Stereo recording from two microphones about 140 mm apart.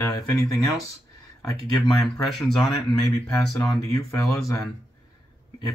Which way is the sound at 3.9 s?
25° left (ahead or behind).